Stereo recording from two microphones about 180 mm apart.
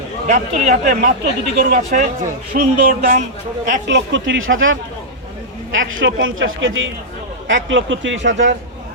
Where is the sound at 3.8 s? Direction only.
80° right.